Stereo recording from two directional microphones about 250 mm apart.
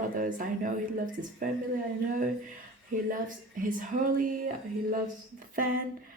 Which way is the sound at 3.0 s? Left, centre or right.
Right.